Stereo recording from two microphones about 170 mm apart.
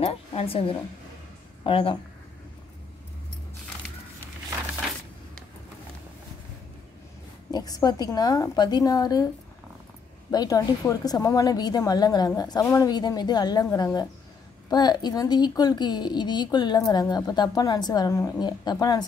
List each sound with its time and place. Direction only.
0.0 s a woman's voice: 35° left (ahead or behind)
7.5 s speech: 20° left (ahead or behind)
10.3 s speech: 20° left (ahead or behind)